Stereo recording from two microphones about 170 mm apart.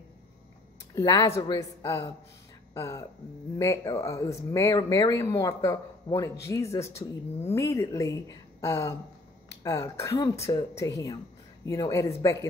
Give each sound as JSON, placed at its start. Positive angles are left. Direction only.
{"t": 0.9, "sound": "a woman's voice", "side_deg": 20}